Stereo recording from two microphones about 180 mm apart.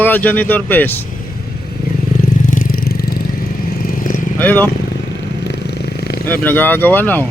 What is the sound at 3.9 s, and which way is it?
Vehicle, 45° left (ahead or behind).